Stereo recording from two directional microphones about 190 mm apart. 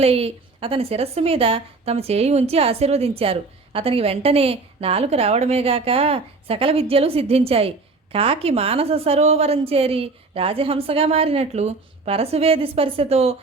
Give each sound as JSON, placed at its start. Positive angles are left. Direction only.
{"t": 0.0, "sound": "a woman's voice", "side_deg": -30}